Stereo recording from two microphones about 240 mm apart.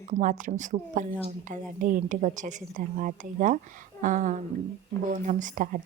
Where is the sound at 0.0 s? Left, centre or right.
Right.